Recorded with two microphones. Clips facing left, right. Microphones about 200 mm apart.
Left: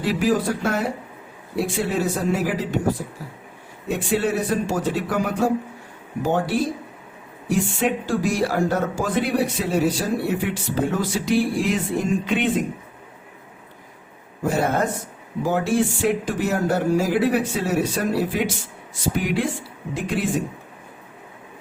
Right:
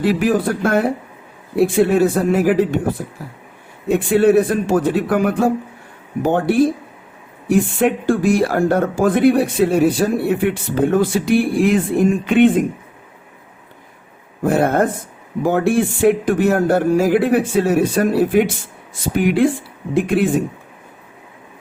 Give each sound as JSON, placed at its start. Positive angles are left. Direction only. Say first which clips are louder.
{"t": 0.2, "sound": "speech", "louder": "right 4 dB", "side_deg": -55}
{"t": 3.9, "sound": "speech", "louder": "right 10 dB", "side_deg": -55}
{"t": 14.4, "sound": "speech", "louder": "right 6 dB", "side_deg": -55}